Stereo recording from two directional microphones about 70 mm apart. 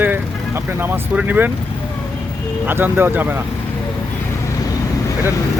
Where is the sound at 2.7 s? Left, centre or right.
Right.